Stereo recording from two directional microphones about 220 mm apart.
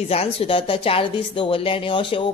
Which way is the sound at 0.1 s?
25° left (ahead or behind).